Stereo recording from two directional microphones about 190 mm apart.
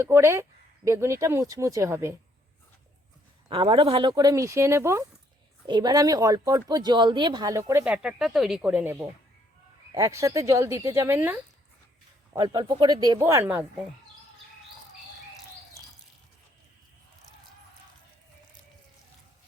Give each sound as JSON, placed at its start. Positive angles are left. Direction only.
{"t": 0.0, "sound": "speech", "side_deg": -15}
{"t": 3.5, "sound": "speech", "side_deg": -25}